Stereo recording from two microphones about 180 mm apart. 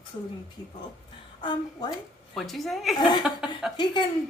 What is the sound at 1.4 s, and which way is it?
Speech, 25° left (ahead or behind).